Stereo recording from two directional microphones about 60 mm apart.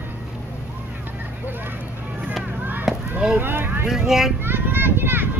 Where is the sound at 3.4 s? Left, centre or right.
Right.